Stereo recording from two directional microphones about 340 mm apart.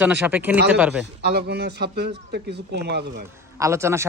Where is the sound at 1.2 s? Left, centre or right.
Right.